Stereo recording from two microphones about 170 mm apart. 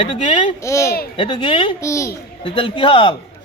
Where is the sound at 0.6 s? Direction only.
15° left (ahead or behind).